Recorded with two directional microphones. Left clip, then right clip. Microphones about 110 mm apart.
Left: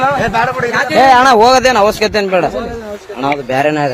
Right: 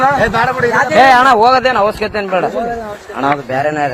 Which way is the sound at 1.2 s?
75° left (ahead or behind).